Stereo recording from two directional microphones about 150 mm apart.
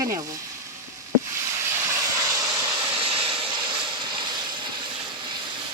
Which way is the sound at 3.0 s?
40° right (ahead or behind).